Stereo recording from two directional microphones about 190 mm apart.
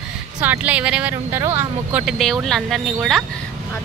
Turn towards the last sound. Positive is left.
turn(degrees=0)  # may be behind; listen again after turning